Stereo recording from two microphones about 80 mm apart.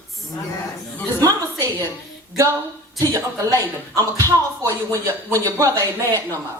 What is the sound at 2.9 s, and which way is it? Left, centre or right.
A woman's voice, right.